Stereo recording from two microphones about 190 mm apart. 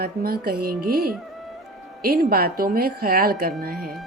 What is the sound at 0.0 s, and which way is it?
A woman's voice, 50° right (ahead or behind).